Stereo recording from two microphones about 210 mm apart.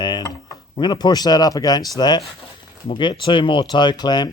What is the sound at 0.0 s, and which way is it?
Speech, 20° left (ahead or behind).